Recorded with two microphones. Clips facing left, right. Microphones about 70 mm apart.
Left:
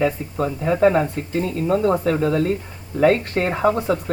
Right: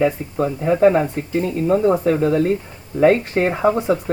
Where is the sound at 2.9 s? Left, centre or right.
Centre.